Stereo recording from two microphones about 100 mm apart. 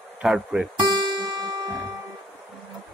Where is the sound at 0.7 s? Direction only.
45° right (ahead or behind).